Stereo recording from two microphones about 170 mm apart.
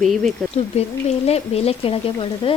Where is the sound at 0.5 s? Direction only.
40° left (ahead or behind).